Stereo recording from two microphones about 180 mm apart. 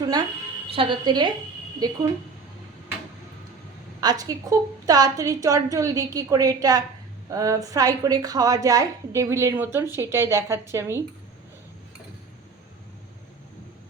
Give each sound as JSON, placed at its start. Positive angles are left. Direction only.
{"t": 0.7, "sound": "a woman's voice", "side_deg": -30}
{"t": 4.0, "sound": "a woman's voice", "side_deg": -20}